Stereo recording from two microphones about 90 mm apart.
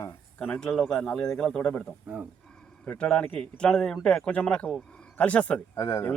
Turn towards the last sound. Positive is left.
turn(degrees=30)  # may be behind; listen again after turning